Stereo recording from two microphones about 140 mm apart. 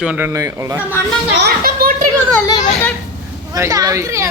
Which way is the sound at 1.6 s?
90° right.